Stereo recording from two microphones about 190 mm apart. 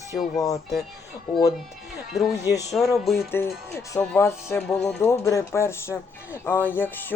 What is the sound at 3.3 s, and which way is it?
Music, 15° left (ahead or behind).